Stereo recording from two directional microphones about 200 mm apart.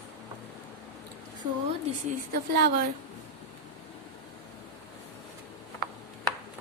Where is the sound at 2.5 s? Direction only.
50° right (ahead or behind).